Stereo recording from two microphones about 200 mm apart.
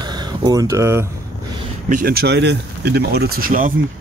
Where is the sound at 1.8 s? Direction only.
45° right (ahead or behind).